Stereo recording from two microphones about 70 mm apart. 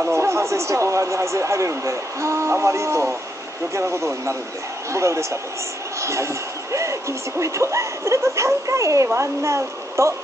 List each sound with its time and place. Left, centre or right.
0.1 s speech: right